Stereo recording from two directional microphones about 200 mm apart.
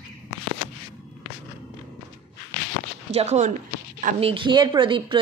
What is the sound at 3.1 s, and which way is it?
A woman's voice, 30° right (ahead or behind).